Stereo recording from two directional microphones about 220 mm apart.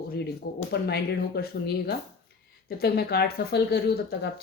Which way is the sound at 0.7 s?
45° left (ahead or behind).